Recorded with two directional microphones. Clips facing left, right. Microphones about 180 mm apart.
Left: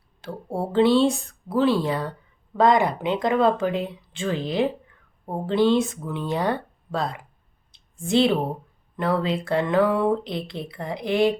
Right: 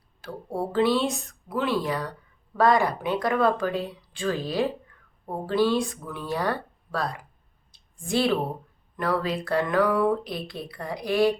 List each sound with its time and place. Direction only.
0.2 s speech: 25° left (ahead or behind)
7.7 s a sound: 25° left (ahead or behind)
9.0 s speech: 25° left (ahead or behind)